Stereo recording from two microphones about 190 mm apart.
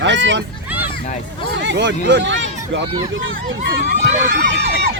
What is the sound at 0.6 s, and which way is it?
Hubbub, 10° right (ahead or behind).